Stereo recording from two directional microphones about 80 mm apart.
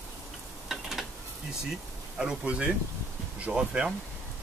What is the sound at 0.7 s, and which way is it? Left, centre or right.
Stir, centre.